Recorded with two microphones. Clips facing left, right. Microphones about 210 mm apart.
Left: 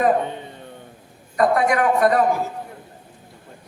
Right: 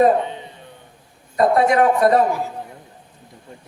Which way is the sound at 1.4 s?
25° right (ahead or behind).